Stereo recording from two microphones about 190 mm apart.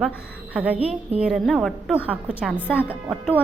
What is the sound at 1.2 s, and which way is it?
A woman's voice, 5° right (ahead or behind).